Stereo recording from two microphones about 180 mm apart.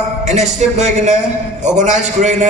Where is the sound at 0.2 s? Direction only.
40° right (ahead or behind).